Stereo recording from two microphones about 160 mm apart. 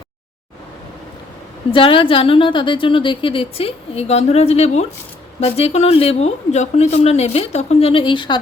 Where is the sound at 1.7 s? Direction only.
35° left (ahead or behind).